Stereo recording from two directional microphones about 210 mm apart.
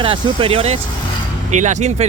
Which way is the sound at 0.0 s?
25° right (ahead or behind).